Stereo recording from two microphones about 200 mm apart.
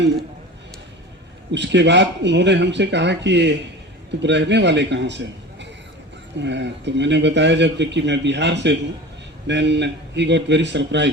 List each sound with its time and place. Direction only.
1.5 s a man's voice: 60° right (ahead or behind)